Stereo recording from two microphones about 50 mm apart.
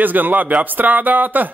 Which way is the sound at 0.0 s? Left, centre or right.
Right.